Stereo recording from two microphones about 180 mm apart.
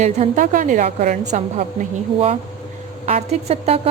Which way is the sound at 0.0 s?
45° right (ahead or behind).